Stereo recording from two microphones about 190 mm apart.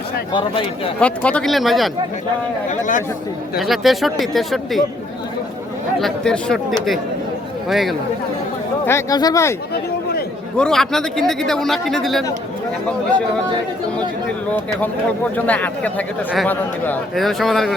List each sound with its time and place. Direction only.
0.9 s speech: 5° left (ahead or behind)
2.6 s speech: 45° left (ahead or behind)
3.6 s speech: centre (ahead or behind)
6.0 s speech: centre (ahead or behind)
8.9 s speech: 15° left (ahead or behind)
10.6 s speech: centre (ahead or behind)
15.4 s speech: 10° left (ahead or behind)